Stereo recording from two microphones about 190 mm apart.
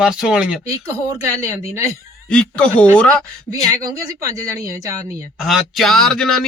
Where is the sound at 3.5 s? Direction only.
15° right (ahead or behind).